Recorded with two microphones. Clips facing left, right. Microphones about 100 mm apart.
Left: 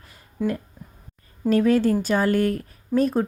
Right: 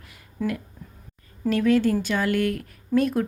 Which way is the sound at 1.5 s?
40° left (ahead or behind).